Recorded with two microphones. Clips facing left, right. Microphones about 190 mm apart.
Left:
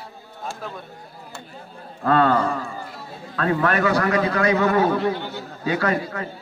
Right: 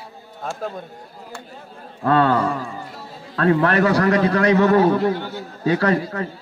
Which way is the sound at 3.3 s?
35° right (ahead or behind).